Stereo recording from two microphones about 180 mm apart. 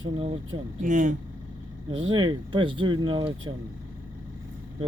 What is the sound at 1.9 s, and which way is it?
Speech, 25° right (ahead or behind).